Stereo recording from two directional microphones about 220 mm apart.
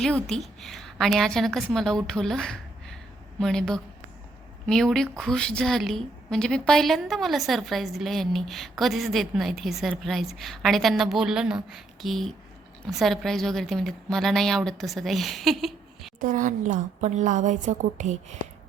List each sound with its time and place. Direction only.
0.0 s a woman's voice: centre (ahead or behind)
16.2 s a woman's voice: 35° right (ahead or behind)